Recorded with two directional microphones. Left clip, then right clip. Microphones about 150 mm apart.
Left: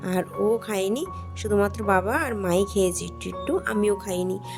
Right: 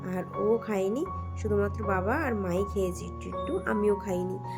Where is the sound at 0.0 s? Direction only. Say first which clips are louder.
Left 5 dB; 50° left (ahead or behind).